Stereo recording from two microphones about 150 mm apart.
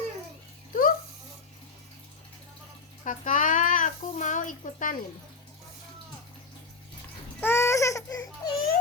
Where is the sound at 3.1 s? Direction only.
60° left (ahead or behind).